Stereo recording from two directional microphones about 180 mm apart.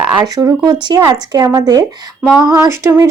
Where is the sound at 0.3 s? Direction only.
20° right (ahead or behind).